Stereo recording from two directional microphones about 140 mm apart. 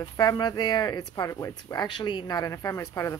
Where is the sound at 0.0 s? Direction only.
30° left (ahead or behind).